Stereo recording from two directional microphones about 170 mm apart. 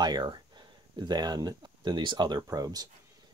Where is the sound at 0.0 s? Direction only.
25° right (ahead or behind).